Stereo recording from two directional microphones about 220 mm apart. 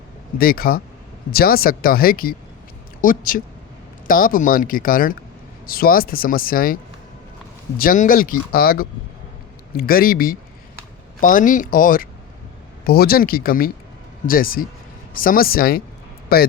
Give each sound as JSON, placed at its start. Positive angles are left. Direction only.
{"t": 0.3, "sound": "speech", "side_deg": 40}
{"t": 7.8, "sound": "speech", "side_deg": 40}